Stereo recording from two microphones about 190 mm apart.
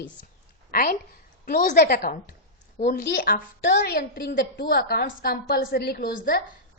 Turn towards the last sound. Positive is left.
turn(degrees=50)  # may be behind; listen again after turning